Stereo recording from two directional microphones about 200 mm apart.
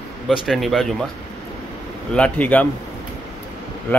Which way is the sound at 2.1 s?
5° left (ahead or behind).